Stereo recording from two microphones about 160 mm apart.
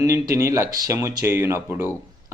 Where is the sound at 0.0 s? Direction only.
20° right (ahead or behind).